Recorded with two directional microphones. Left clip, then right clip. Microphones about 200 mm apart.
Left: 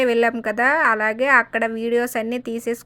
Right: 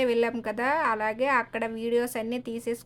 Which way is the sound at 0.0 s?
15° left (ahead or behind).